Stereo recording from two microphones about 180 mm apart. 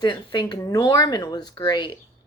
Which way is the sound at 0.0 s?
25° left (ahead or behind).